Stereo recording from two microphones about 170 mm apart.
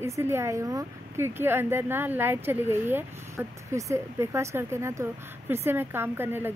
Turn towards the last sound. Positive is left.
turn(degrees=-15)  # may be behind; listen again after turning